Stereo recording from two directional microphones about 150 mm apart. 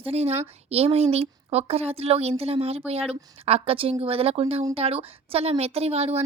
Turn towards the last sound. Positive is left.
turn(degrees=-45)  # may be behind; listen again after turning